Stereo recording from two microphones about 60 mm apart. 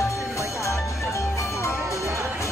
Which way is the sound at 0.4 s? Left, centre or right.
Left.